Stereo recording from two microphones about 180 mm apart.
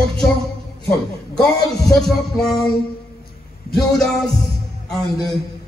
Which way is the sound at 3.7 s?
Centre (ahead or behind).